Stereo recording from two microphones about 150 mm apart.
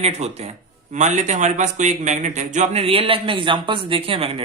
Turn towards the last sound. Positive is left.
turn(degrees=-40)  # may be behind; listen again after turning